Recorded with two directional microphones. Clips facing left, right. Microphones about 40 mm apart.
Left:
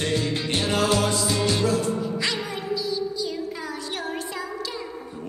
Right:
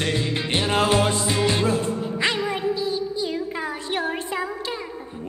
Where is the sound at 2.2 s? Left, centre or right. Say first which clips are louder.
Right 5 dB; right.